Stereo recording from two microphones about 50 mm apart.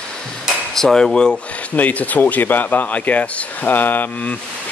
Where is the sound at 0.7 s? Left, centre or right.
Centre.